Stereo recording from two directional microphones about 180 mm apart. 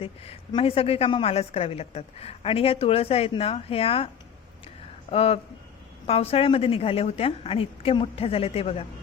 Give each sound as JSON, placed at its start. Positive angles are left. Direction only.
{"t": 0.0, "sound": "a woman's voice", "side_deg": 30}
{"t": 5.1, "sound": "a woman's voice", "side_deg": 35}